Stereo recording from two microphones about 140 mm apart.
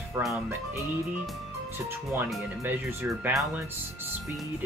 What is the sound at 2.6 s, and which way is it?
Speech, 15° right (ahead or behind).